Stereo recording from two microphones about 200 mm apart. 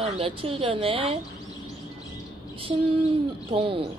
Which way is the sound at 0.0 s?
30° right (ahead or behind).